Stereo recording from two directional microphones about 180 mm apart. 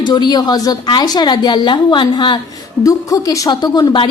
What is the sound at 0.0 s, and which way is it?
A woman's voice, 25° left (ahead or behind).